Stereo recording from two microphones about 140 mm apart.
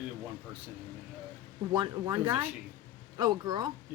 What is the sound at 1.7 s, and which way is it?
A woman's voice, 30° right (ahead or behind).